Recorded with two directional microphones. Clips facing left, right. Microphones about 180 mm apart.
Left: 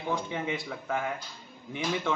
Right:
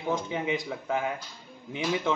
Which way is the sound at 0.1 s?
15° right (ahead or behind).